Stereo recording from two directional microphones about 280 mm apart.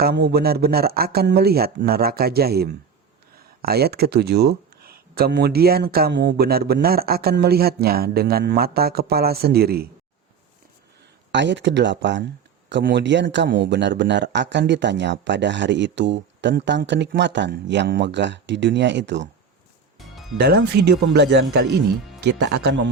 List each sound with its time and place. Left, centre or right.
0.0 s a man's voice: right
11.3 s a man's voice: right
20.4 s a man's voice: right